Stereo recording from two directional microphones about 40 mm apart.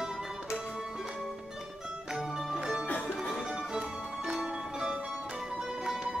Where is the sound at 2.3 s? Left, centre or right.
Centre.